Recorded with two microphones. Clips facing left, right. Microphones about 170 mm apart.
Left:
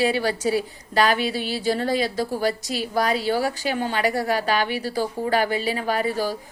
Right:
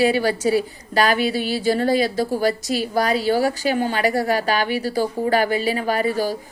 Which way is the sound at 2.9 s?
40° right (ahead or behind).